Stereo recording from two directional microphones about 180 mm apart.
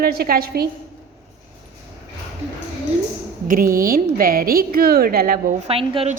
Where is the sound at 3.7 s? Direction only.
55° right (ahead or behind).